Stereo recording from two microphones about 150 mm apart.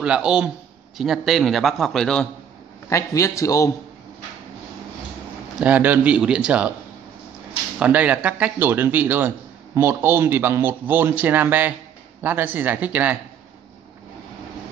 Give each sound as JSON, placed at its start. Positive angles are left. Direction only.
{"t": 0.0, "sound": "a man's voice", "side_deg": -5}
{"t": 2.9, "sound": "a man's voice", "side_deg": 20}
{"t": 5.6, "sound": "a man's voice", "side_deg": -10}
{"t": 7.8, "sound": "a man's voice", "side_deg": -10}